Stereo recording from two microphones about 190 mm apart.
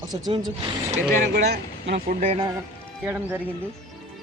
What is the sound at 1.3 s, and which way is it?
Speech, 60° right (ahead or behind).